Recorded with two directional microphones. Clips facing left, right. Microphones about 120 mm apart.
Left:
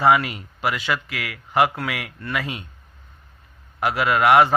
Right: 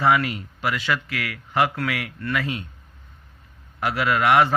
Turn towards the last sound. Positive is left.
turn(degrees=20)  # may be behind; listen again after turning